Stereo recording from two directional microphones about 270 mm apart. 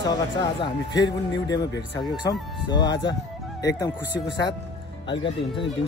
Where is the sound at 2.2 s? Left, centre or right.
Centre.